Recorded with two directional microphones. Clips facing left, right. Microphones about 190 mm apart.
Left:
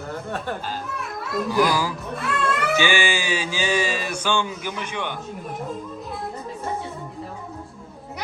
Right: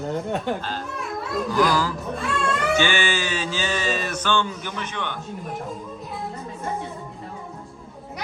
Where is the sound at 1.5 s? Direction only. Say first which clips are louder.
Even; 10° left (ahead or behind).